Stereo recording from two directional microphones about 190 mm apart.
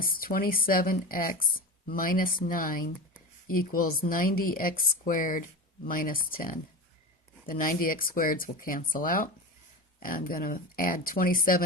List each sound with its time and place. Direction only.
0.0 s speech: 50° left (ahead or behind)